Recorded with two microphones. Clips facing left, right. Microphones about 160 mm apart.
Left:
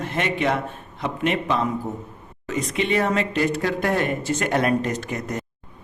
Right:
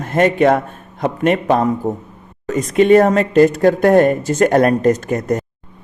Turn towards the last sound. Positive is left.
turn(degrees=-45)  # may be behind; listen again after turning